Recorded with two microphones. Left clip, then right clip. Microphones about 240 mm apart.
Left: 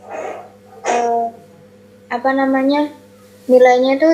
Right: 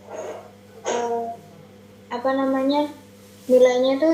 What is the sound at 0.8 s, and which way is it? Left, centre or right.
Music, left.